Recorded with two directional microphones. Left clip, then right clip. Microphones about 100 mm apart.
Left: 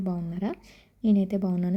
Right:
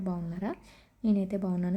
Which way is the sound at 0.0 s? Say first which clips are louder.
Left 3 dB; 35° left (ahead or behind).